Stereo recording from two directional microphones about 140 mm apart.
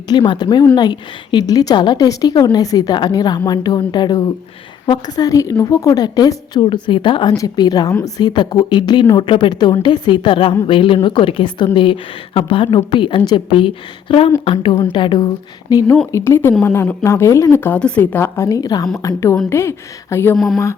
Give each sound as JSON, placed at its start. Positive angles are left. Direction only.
{"t": 0.1, "sound": "a woman's voice", "side_deg": 30}
{"t": 20.3, "sound": "speech", "side_deg": 0}